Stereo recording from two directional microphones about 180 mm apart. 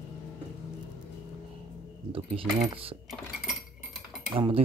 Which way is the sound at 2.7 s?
30° right (ahead or behind).